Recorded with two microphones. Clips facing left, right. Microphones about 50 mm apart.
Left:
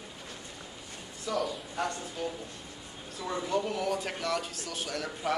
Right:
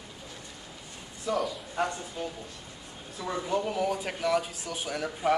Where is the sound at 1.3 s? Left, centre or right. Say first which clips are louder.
Right 2 dB; centre.